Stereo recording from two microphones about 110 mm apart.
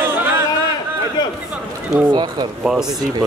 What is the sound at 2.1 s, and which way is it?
Speech, 40° right (ahead or behind).